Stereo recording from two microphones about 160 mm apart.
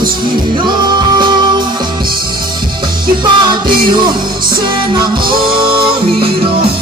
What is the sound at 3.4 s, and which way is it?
Music, 30° right (ahead or behind).